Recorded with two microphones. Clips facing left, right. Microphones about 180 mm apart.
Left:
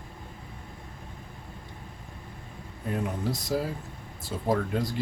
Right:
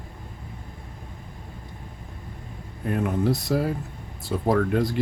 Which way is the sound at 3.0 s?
60° right (ahead or behind).